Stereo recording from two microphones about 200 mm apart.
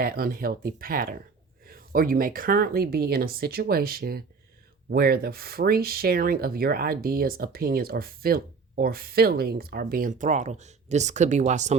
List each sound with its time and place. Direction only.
0.0 s speech: 50° right (ahead or behind)